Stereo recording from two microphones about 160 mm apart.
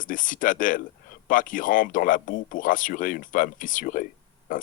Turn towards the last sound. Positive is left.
turn(degrees=55)  # may be behind; listen again after turning